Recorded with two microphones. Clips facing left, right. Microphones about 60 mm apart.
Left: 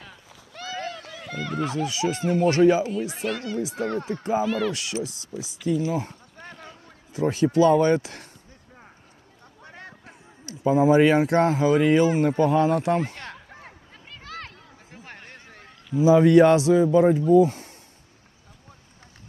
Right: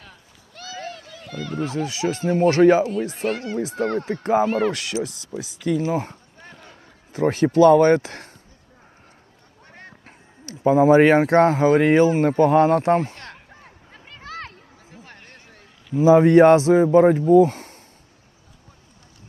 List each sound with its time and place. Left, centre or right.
0.7 s a sound: left
1.3 s speech: left
1.7 s speech: right
2.6 s speech: right
5.0 s speech: right
5.8 s speech: right
6.4 s a sound: left
7.1 s speech: right
10.4 s speech: right
12.8 s speech: right
13.9 s a sound: right
14.9 s a sound: left
16.0 s speech: right